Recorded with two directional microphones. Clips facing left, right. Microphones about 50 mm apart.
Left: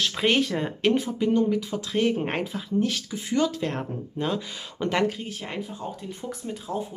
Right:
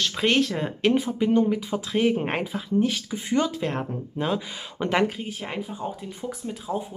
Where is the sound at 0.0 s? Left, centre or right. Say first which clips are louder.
Right 1 dB; centre.